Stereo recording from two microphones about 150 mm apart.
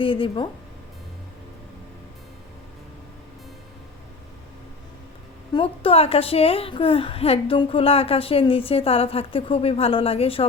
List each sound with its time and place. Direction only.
0.0 s a woman's voice: 35° left (ahead or behind)
5.5 s a woman's voice: 40° left (ahead or behind)